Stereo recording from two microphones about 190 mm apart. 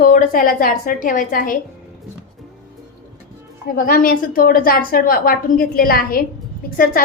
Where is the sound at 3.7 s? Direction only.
50° left (ahead or behind).